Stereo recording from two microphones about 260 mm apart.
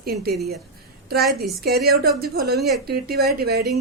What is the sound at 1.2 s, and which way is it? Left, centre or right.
Speech, centre.